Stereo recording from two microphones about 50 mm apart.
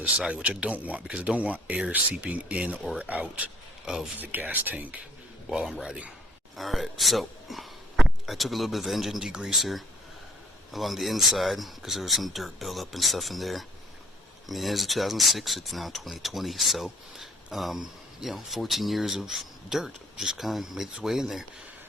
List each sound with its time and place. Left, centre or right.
0.0 s speech: centre
3.8 s speech: centre
4.2 s speech: right
5.5 s speech: centre
10.7 s speech: centre